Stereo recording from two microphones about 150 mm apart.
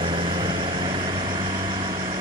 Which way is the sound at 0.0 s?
35° right (ahead or behind).